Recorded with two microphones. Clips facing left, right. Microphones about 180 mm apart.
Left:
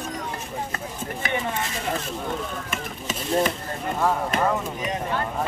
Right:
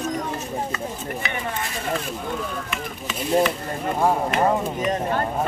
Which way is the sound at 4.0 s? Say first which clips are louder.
Right 3 dB; 25° right (ahead or behind).